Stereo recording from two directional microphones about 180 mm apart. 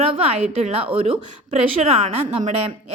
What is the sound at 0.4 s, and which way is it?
A woman's voice, 35° right (ahead or behind).